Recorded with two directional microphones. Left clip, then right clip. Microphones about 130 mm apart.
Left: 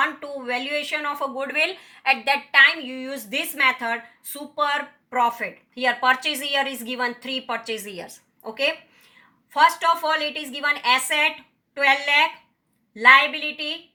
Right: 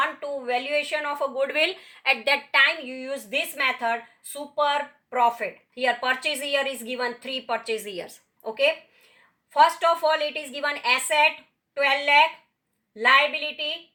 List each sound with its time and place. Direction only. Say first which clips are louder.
0.0 s a woman's voice: left 2 dB; 25° right (ahead or behind)
9.5 s a woman's voice: left 1 dB; 25° right (ahead or behind)